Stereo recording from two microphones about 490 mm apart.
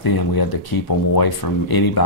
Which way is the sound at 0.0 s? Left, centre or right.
Left.